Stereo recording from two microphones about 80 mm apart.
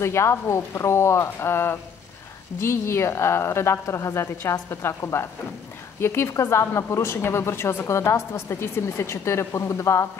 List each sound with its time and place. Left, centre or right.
0.0 s a woman's voice: left